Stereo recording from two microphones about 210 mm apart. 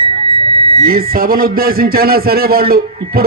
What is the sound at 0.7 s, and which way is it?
Speech, 45° right (ahead or behind).